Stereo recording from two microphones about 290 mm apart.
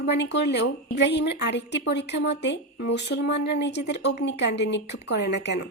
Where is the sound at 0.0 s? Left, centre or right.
Left.